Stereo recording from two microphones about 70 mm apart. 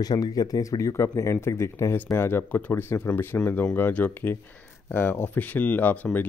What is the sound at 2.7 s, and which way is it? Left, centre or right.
Speech, left.